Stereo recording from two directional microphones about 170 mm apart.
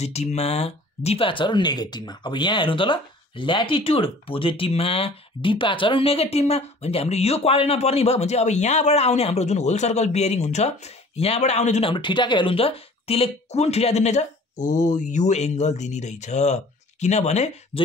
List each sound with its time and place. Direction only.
0.0 s speech: 40° left (ahead or behind)